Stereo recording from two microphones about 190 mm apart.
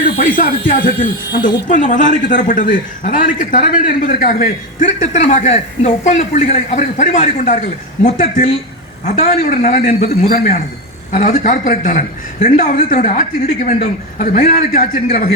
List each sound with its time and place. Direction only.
0.2 s a man's voice: 45° left (ahead or behind)